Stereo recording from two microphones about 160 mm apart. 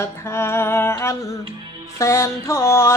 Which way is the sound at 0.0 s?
15° left (ahead or behind).